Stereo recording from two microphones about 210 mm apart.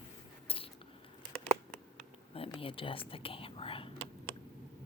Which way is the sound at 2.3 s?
25° left (ahead or behind).